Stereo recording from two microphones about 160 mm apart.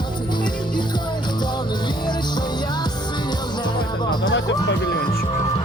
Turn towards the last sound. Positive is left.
turn(degrees=90)